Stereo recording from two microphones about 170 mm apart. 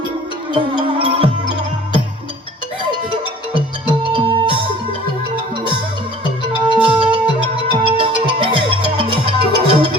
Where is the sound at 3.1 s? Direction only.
30° right (ahead or behind).